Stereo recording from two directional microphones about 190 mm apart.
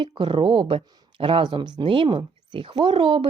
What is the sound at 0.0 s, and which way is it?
Speech, 25° right (ahead or behind).